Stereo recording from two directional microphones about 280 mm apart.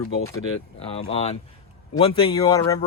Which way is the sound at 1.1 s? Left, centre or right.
Left.